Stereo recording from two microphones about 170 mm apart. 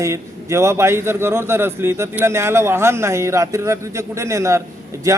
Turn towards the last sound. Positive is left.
turn(degrees=-20)  # may be behind; listen again after turning